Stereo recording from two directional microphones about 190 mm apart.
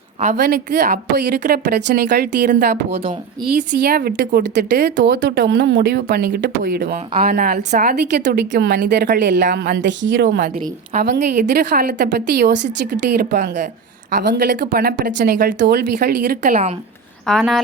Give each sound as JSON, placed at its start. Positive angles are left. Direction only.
{"t": 0.3, "sound": "speech", "side_deg": -55}
{"t": 10.9, "sound": "speech", "side_deg": -60}
{"t": 17.2, "sound": "speech", "side_deg": 0}